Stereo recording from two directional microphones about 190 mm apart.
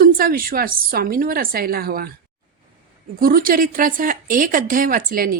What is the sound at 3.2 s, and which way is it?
Speech, 50° right (ahead or behind).